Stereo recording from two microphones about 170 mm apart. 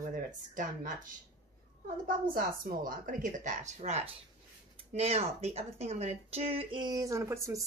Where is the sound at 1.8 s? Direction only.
55° right (ahead or behind).